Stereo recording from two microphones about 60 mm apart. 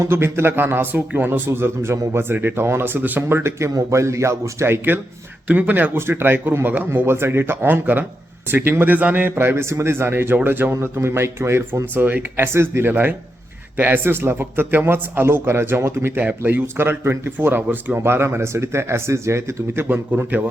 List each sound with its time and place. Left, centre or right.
0.0 s a man's voice: right
1.5 s a man's voice: right
3.8 s speech: right
5.5 s a man's voice: right
16.2 s a man's voice: right
19.9 s a man's voice: right